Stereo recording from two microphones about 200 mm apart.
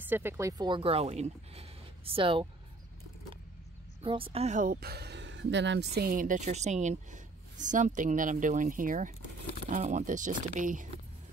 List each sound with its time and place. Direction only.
0.0 s speech: 10° right (ahead or behind); by 2.4 s 25° right (ahead or behind)
4.0 s speech: 25° right (ahead or behind)